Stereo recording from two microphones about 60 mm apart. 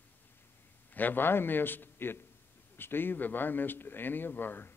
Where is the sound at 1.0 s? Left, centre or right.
Left.